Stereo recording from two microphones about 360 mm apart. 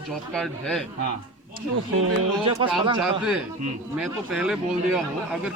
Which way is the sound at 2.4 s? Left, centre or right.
Centre.